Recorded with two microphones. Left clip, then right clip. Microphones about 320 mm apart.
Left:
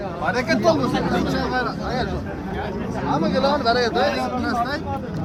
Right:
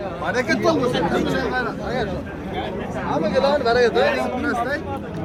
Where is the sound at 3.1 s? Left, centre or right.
Left.